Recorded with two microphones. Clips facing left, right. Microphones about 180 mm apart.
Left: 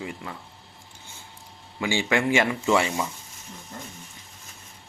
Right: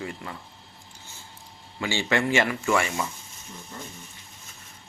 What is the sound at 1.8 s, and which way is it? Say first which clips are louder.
Speech: left 1 dB; 15° left (ahead or behind).